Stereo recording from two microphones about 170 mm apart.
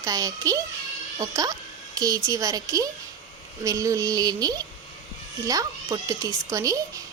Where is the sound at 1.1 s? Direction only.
20° right (ahead or behind).